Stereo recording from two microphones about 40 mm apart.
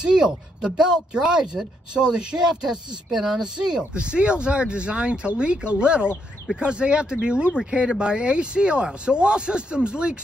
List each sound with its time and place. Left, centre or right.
0.0 s speech: centre
3.9 s speech: right